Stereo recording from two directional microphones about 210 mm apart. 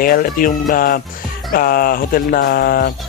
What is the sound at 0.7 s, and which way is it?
Speech, 40° left (ahead or behind).